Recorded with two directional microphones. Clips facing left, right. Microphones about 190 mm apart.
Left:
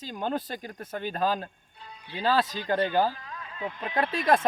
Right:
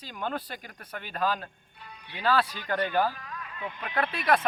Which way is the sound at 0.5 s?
40° left (ahead or behind).